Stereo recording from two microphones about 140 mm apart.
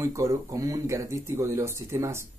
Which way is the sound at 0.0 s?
20° right (ahead or behind).